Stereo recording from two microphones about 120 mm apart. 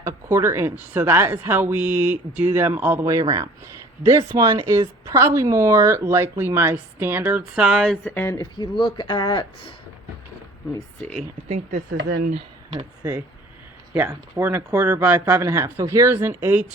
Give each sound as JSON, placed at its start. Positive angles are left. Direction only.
{"t": 0.0, "sound": "speech", "side_deg": -20}
{"t": 3.1, "sound": "speech", "side_deg": -30}
{"t": 8.0, "sound": "speech", "side_deg": 20}
{"t": 8.4, "sound": "speech", "side_deg": 35}
{"t": 11.4, "sound": "speech", "side_deg": -65}
{"t": 13.9, "sound": "speech", "side_deg": -20}